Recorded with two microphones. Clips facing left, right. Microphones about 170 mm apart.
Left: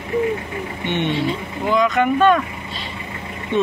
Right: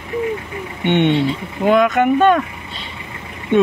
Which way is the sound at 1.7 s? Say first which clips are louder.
Right 4 dB; 55° right (ahead or behind).